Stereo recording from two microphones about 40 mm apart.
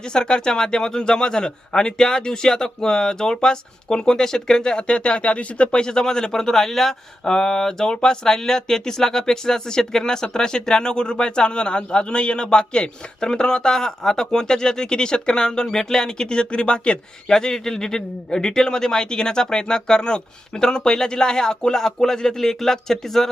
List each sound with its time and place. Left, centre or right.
0.1 s speech: left
5.8 s speech: centre